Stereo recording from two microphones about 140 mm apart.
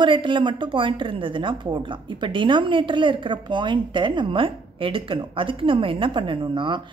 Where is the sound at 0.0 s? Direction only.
35° right (ahead or behind).